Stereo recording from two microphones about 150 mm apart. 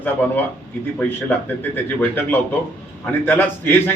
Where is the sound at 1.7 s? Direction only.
15° left (ahead or behind).